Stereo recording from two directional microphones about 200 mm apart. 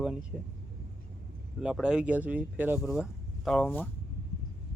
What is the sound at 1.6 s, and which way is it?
Speech, 5° right (ahead or behind).